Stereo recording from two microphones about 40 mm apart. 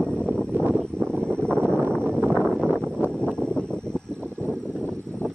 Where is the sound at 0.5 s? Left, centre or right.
Right.